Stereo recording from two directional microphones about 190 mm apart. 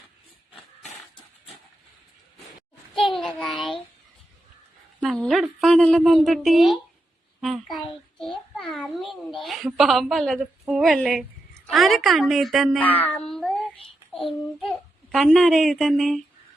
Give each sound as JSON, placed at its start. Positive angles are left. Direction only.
{"t": 3.0, "sound": "child singing", "side_deg": 0}
{"t": 4.9, "sound": "a woman's voice", "side_deg": 0}
{"t": 8.2, "sound": "child singing", "side_deg": 0}
{"t": 8.7, "sound": "a sound", "side_deg": 0}
{"t": 11.6, "sound": "a child's voice", "side_deg": 0}